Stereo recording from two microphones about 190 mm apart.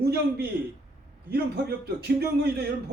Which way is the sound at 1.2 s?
55° right (ahead or behind).